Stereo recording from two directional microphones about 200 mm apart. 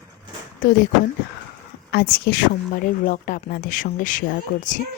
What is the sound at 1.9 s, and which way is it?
A woman's voice, 50° left (ahead or behind).